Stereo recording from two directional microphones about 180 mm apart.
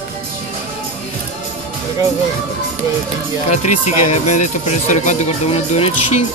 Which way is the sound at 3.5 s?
40° left (ahead or behind).